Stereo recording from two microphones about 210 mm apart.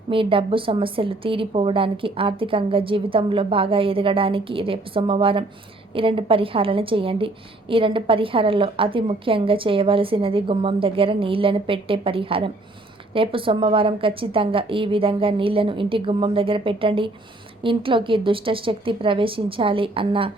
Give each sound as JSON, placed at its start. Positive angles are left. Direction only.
{"t": 0.1, "sound": "a woman's voice", "side_deg": -25}